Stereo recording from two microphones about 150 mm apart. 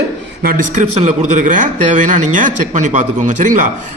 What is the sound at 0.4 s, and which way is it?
A man's voice, 65° right (ahead or behind).